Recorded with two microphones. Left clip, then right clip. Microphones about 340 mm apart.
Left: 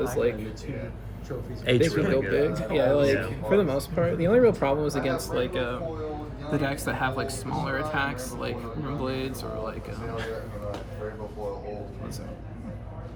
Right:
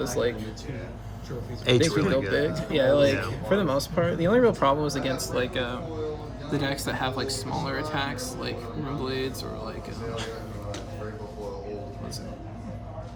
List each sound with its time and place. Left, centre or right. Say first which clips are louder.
0.0 s speech: left 1 dB; centre
1.6 s speech: right 1 dB; centre
2.5 s speech: left 2 dB; centre
2.7 s speech: right 2 dB; centre